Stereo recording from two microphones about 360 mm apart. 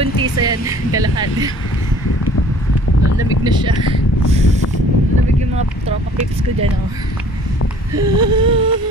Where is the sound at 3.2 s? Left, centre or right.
Centre.